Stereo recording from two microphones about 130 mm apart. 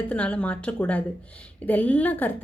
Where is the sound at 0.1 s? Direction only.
10° left (ahead or behind).